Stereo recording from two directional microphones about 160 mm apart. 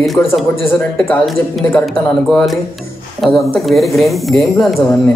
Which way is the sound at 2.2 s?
Centre (ahead or behind).